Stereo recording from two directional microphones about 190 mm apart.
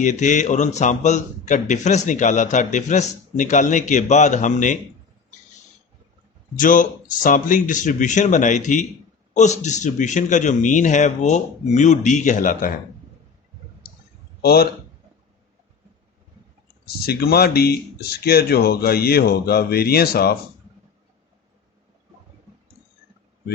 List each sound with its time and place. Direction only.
0.0 s a man's voice: 40° left (ahead or behind)
6.6 s a man's voice: 45° left (ahead or behind)
14.4 s speech: 55° left (ahead or behind)
16.8 s speech: 55° left (ahead or behind)